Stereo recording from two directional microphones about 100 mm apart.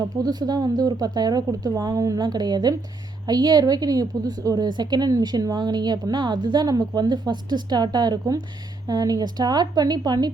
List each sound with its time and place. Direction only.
0.0 s a woman's voice: 45° right (ahead or behind)